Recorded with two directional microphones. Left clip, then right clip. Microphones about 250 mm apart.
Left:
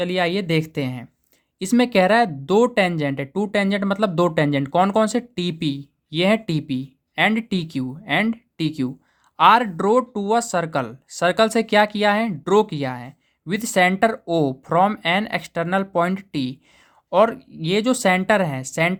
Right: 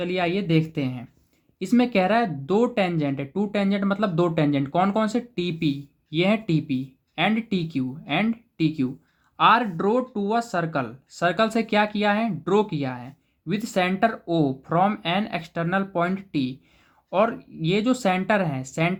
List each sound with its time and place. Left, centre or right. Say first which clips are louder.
0.0 s speech: left 4 dB; left